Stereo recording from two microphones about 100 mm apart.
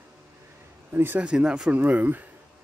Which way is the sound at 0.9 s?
20° right (ahead or behind).